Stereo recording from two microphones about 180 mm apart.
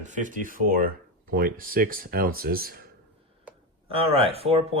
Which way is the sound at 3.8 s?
30° right (ahead or behind).